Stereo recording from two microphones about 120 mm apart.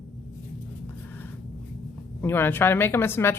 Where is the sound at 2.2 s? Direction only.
20° left (ahead or behind).